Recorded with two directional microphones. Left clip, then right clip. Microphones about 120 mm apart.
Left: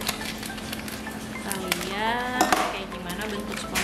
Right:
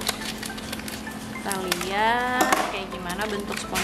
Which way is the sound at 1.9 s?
25° right (ahead or behind).